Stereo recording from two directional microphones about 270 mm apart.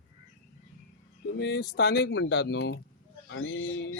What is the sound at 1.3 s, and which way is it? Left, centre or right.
Speech, left.